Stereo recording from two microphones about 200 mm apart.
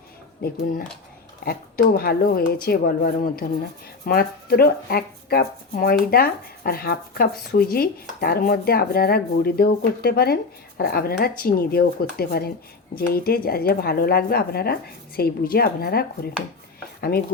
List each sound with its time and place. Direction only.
0.4 s speech: 50° left (ahead or behind)
17.0 s chopping: 50° left (ahead or behind)